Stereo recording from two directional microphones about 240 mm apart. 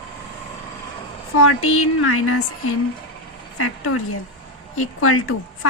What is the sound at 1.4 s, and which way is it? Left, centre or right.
Speech, left.